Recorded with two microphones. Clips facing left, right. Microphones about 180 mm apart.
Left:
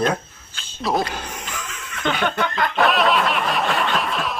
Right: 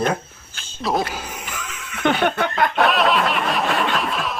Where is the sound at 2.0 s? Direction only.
55° right (ahead or behind).